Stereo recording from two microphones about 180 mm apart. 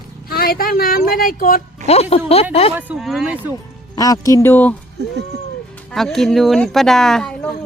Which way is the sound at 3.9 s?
20° left (ahead or behind).